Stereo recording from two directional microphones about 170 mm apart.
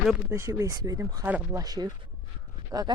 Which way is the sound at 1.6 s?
25° right (ahead or behind).